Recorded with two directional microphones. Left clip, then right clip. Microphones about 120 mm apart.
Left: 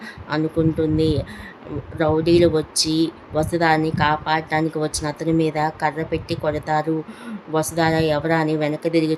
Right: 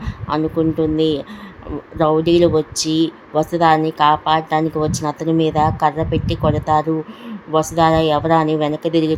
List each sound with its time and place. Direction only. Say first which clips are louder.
0.3 s speech: right 3 dB; 15° right (ahead or behind)